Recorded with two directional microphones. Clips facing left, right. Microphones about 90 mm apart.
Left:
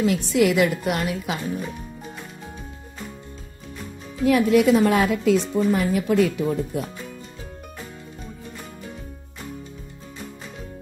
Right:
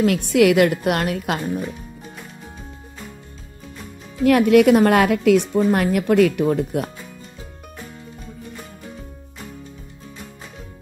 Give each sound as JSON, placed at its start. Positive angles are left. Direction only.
{"t": 0.0, "sound": "a woman's voice", "side_deg": -60}
{"t": 4.2, "sound": "a woman's voice", "side_deg": -65}